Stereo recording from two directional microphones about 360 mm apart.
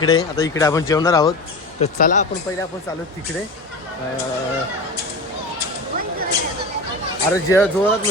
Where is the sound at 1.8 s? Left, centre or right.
Centre.